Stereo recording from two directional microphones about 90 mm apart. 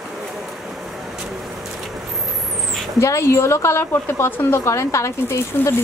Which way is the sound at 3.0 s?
35° left (ahead or behind).